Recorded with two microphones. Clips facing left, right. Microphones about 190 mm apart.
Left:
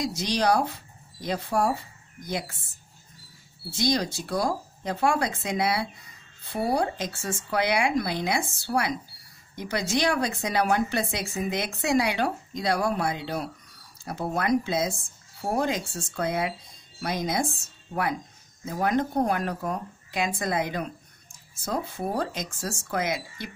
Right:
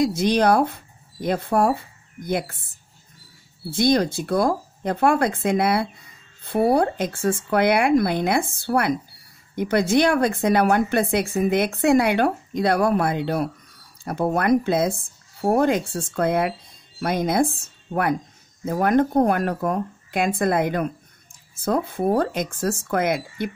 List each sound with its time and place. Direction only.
0.0 s speech: 55° right (ahead or behind)
3.7 s speech: 55° right (ahead or behind)